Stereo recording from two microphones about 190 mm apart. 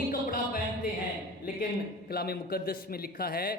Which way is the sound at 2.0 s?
55° left (ahead or behind).